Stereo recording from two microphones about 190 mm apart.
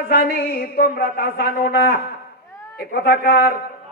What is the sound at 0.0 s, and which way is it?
A man's voice, 55° left (ahead or behind).